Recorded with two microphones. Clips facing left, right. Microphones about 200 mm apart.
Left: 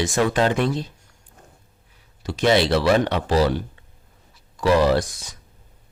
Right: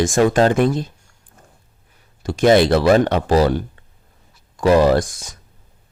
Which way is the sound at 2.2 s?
50° right (ahead or behind).